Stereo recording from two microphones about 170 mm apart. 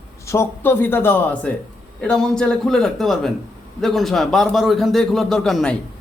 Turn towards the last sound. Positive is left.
turn(degrees=5)  # may be behind; listen again after turning